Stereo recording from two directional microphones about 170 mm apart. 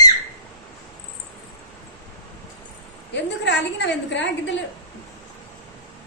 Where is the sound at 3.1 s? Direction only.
90° left.